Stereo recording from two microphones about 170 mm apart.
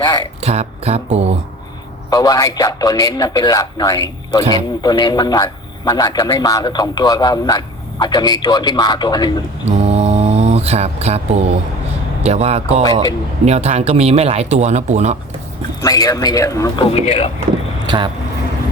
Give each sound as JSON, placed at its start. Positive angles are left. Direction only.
{"t": 0.4, "sound": "speech", "side_deg": -40}
{"t": 2.0, "sound": "a man's voice", "side_deg": 20}
{"t": 9.6, "sound": "mantra", "side_deg": -40}
{"t": 12.2, "sound": "speech", "side_deg": -40}
{"t": 15.8, "sound": "a man's voice", "side_deg": 20}
{"t": 16.9, "sound": "speech", "side_deg": 40}
{"t": 17.8, "sound": "speech", "side_deg": -25}